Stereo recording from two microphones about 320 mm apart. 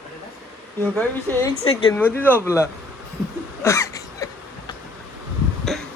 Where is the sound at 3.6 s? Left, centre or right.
Centre.